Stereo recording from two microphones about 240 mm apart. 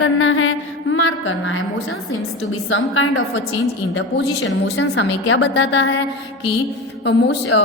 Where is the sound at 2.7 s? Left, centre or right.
Left.